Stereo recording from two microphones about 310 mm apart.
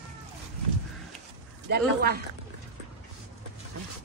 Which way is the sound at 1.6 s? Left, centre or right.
Right.